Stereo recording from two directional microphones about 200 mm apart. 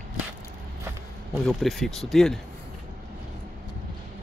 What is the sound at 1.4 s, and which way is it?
Speech, centre (ahead or behind).